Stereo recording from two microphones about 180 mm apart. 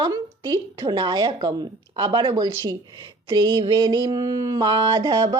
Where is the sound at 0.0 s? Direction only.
25° right (ahead or behind).